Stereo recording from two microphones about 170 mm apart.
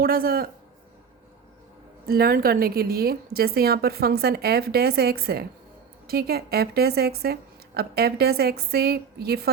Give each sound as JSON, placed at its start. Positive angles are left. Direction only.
{"t": 0.0, "sound": "a man's voice", "side_deg": -60}
{"t": 2.0, "sound": "a woman's voice", "side_deg": -60}